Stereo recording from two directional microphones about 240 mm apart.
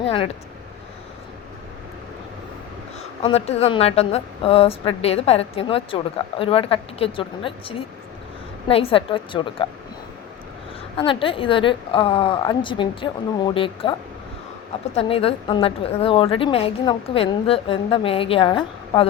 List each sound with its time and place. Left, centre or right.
3.2 s a woman's voice: left
10.9 s a woman's voice: left
14.9 s a woman's voice: left